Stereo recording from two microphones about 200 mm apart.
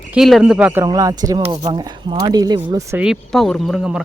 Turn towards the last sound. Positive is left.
turn(degrees=-5)  # may be behind; listen again after turning